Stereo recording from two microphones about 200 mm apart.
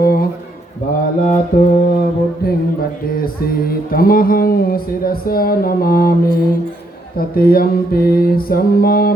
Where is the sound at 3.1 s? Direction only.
45° left (ahead or behind).